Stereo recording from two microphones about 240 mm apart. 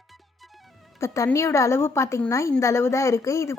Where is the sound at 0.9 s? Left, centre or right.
Centre.